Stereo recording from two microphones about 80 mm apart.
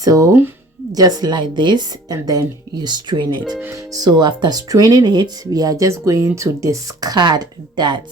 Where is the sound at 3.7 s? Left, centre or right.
Right.